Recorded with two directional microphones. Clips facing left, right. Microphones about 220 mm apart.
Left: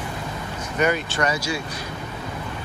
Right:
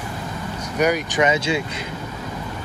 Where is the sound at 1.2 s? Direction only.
20° right (ahead or behind).